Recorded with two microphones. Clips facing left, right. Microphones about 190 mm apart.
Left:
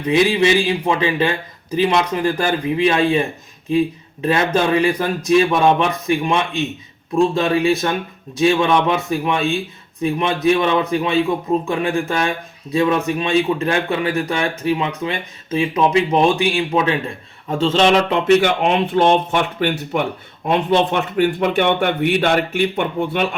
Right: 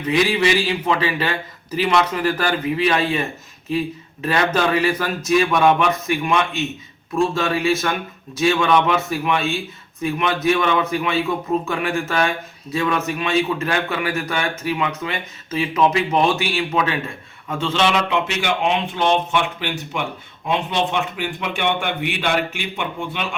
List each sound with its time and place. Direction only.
0.1 s a man's voice: 20° left (ahead or behind)
4.3 s a man's voice: 25° left (ahead or behind)
7.6 s a man's voice: 15° left (ahead or behind)
17.5 s a man's voice: 40° left (ahead or behind)